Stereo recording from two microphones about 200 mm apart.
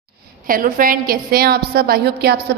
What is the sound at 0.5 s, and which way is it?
A woman's voice, 45° right (ahead or behind).